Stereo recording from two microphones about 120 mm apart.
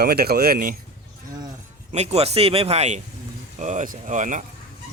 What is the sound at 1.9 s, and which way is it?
Speech, 65° right (ahead or behind).